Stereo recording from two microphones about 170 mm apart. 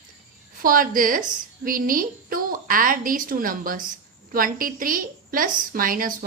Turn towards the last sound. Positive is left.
turn(degrees=-55)  # may be behind; listen again after turning